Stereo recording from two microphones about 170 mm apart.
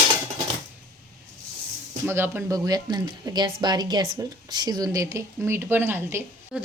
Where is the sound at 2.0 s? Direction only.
10° right (ahead or behind).